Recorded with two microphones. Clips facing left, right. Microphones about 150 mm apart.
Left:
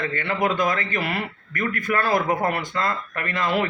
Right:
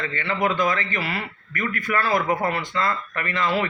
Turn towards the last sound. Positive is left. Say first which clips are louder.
# even
turn(degrees=50)  # may be behind; listen again after turning